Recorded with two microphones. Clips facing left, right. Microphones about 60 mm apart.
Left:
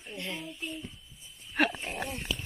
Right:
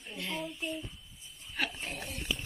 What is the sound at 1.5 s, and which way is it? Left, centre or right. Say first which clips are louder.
Dog: left 8 dB; left.